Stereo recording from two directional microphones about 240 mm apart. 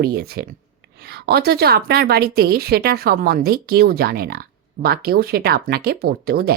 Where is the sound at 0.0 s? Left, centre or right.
Right.